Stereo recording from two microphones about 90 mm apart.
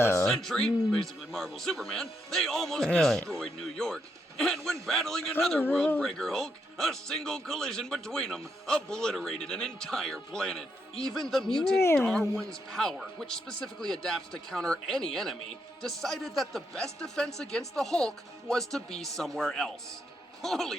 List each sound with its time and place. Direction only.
0.0 s music: 30° left (ahead or behind)
0.3 s speech: 5° left (ahead or behind)